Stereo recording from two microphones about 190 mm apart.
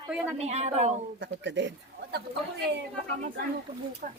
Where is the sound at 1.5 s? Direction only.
70° right (ahead or behind).